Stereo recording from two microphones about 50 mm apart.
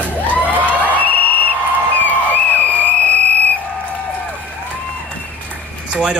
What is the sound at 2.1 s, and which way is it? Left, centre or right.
Music, left.